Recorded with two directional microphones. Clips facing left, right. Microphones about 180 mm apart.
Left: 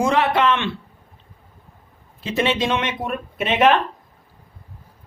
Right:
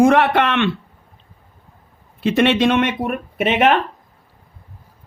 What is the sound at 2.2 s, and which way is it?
Speech, 65° right (ahead or behind).